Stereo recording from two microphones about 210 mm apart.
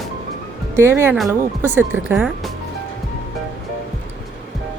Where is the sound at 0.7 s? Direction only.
10° right (ahead or behind).